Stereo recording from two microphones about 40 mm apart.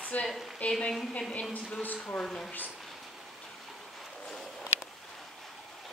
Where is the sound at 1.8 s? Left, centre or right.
Left.